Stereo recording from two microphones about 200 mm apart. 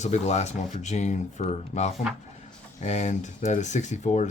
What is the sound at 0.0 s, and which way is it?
Speech, 35° left (ahead or behind).